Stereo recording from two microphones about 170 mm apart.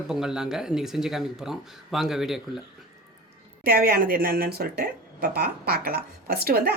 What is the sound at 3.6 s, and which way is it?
A woman's voice, 60° right (ahead or behind).